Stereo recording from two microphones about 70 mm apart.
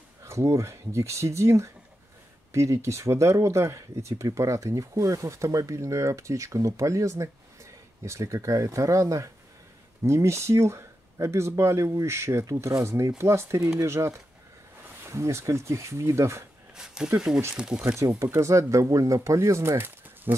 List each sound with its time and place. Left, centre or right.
0.2 s speech: right
13.6 s speech: right
16.7 s a sound: centre
18.3 s speech: right